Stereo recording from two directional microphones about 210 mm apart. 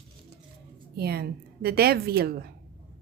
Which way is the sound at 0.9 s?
50° right (ahead or behind).